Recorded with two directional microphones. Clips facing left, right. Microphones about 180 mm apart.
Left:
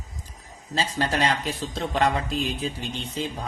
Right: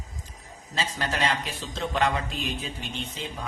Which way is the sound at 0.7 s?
35° left (ahead or behind).